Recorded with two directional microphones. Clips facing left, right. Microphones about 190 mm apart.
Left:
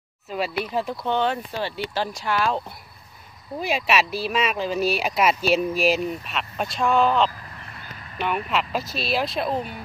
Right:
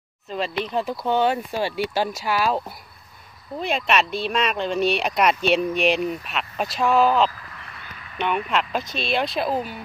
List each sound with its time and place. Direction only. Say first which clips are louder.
0.3 s speech: even; 10° left (ahead or behind)
7.2 s vehicle: right 1 dB; 35° left (ahead or behind)
8.5 s speech: right 1 dB; 5° left (ahead or behind)